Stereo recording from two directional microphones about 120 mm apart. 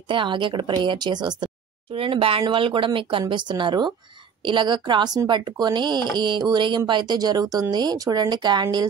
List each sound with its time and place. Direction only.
0.1 s speech: 40° right (ahead or behind)